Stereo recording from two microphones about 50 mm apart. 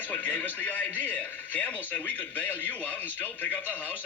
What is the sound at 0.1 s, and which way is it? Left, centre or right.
A man's voice, left.